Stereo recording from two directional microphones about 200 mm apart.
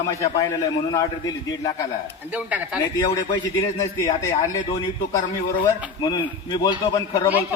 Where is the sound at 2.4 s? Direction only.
5° right (ahead or behind).